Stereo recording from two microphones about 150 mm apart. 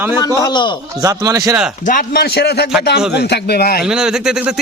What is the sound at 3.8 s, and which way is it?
Speech, 5° right (ahead or behind).